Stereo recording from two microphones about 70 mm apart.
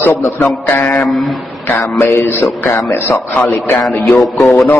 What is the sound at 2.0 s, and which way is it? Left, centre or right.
Mantra, left.